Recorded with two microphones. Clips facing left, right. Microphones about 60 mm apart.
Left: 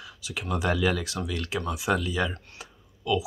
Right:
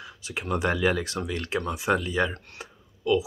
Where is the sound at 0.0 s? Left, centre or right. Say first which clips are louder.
Right 1 dB; right.